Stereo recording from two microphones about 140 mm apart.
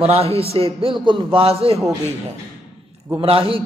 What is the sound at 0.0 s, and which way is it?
A man's voice, 45° right (ahead or behind).